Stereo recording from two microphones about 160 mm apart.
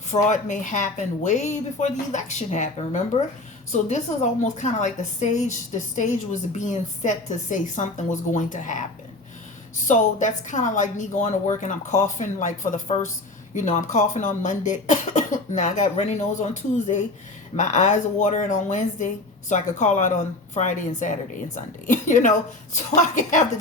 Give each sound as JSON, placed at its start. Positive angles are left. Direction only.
{"t": 0.3, "sound": "a woman's voice", "side_deg": 50}
{"t": 9.8, "sound": "a woman's voice", "side_deg": 50}